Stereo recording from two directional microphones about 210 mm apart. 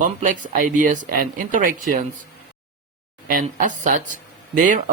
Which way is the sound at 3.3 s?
40° right (ahead or behind).